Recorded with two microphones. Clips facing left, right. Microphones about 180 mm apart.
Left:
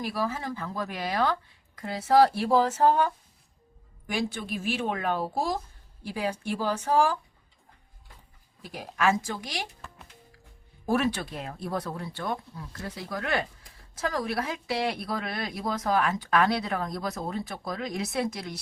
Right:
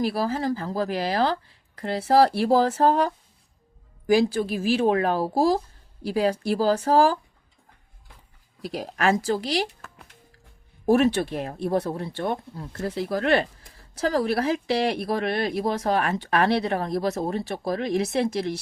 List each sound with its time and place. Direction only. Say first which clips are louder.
0.0 s a woman's voice: right 6 dB; 30° right (ahead or behind)
8.8 s a woman's voice: right 2 dB; 35° right (ahead or behind)
11.3 s a woman's voice: right 8 dB; 25° right (ahead or behind)